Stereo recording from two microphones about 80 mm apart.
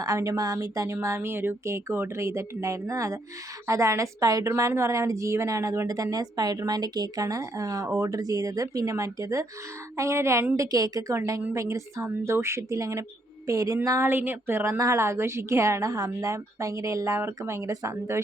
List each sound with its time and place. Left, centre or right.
0.0 s speech: right
1.0 s a woman's voice: right
10.6 s speech: right
11.1 s a woman's voice: right
14.0 s a woman's voice: right